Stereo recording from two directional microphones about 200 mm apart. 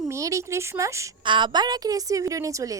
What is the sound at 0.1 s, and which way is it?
A woman's voice, 15° right (ahead or behind).